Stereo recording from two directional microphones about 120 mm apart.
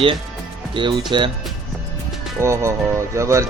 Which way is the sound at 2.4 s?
25° right (ahead or behind).